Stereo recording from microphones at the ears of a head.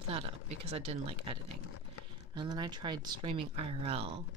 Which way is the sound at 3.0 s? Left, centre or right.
Right.